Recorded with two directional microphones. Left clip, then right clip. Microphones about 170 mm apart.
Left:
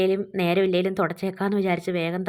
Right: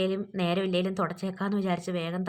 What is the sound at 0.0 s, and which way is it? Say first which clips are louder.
Speech: left 6 dB; 25° left (ahead or behind).